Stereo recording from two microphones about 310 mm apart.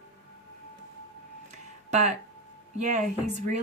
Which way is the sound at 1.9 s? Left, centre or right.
Right.